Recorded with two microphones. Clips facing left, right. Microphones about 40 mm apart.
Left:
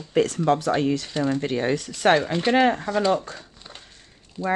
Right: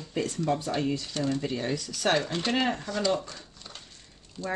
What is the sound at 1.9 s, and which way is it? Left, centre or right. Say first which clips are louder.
Speech: left 7 dB; left.